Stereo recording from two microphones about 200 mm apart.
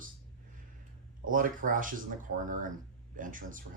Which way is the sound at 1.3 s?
40° right (ahead or behind).